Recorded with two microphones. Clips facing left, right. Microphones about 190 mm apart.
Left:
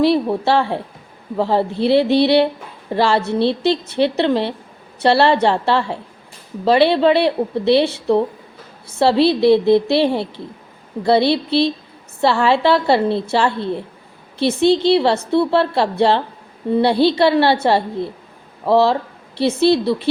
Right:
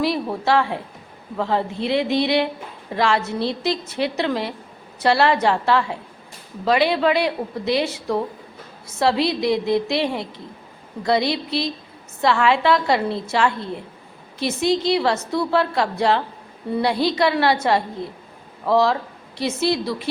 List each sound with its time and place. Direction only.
0.0 s a woman's voice: 30° left (ahead or behind)